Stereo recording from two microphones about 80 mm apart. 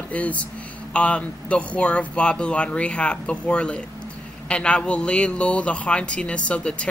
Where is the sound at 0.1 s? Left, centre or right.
Centre.